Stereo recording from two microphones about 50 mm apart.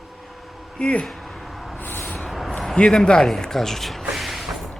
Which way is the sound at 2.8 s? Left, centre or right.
Centre.